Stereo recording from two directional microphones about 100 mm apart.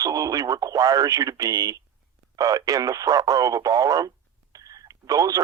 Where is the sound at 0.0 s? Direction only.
35° right (ahead or behind).